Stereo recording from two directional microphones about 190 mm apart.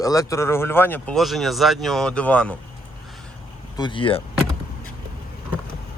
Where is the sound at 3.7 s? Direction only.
25° left (ahead or behind).